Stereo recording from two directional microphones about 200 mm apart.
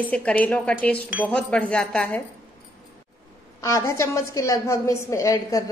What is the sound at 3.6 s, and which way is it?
A woman's voice, 15° left (ahead or behind).